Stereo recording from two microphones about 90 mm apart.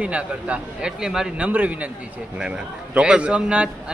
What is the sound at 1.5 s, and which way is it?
A man's voice, 15° right (ahead or behind).